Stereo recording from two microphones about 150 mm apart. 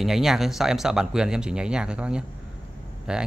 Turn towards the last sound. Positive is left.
turn(degrees=-5)  # may be behind; listen again after turning